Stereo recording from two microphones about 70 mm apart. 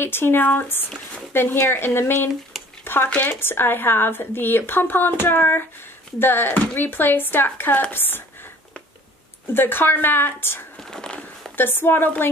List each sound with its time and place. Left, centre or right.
0.0 s speech: left
2.8 s a sound: left
3.3 s speech: left
9.5 s speech: left
10.8 s whispering: centre
11.5 s speech: left